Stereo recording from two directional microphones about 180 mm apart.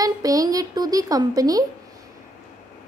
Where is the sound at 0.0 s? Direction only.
20° right (ahead or behind).